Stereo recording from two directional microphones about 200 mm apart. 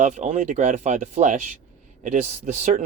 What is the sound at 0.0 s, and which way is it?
Speech, 35° right (ahead or behind).